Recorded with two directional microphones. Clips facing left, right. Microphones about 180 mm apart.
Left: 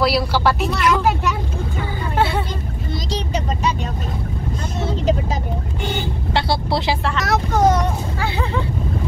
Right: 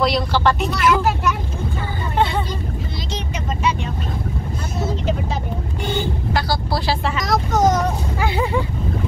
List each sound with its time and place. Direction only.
0.0 s speech: 5° left (ahead or behind)
6.3 s vehicle: 25° left (ahead or behind)
7.2 s child singing: centre (ahead or behind)
8.2 s a sound: 15° right (ahead or behind)